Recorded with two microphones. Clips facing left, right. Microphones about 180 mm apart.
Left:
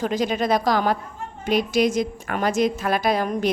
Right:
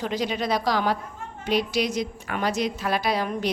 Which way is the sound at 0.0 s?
45° left (ahead or behind).